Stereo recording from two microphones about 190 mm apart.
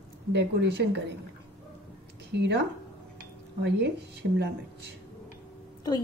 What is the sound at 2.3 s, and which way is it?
Speech, 65° right (ahead or behind).